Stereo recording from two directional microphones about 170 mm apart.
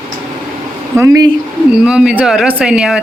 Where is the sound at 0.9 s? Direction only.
20° right (ahead or behind).